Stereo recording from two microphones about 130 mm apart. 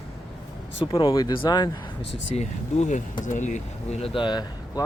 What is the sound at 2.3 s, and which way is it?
Speech, 60° left (ahead or behind).